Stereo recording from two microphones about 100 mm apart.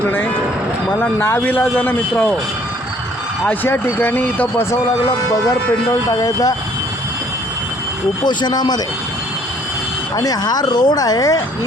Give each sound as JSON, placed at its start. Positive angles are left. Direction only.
{"t": 0.9, "sound": "speech", "side_deg": 25}
{"t": 3.4, "sound": "speech", "side_deg": 20}
{"t": 6.1, "sound": "speech", "side_deg": 35}
{"t": 8.3, "sound": "speech", "side_deg": 45}
{"t": 10.2, "sound": "speech", "side_deg": 40}